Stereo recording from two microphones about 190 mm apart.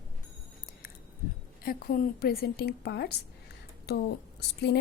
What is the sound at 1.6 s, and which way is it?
A woman's voice, 50° left (ahead or behind).